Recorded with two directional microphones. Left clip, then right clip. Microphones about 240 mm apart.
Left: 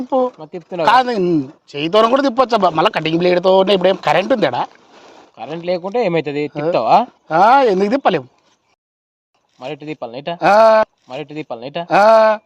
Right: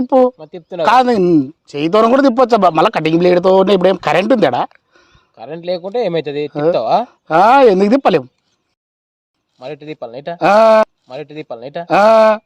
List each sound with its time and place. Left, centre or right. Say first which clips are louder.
0.0 s speech: right 6 dB; right
0.3 s speech: right 1 dB; right
0.9 s speech: right 3 dB; right
5.3 s speech: even; right
9.6 s speech: even; right
10.4 s speech: right 1 dB; right
11.1 s speech: even; right
11.9 s speech: right 1 dB; right